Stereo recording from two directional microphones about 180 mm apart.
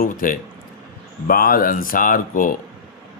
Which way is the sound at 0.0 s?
50° left (ahead or behind).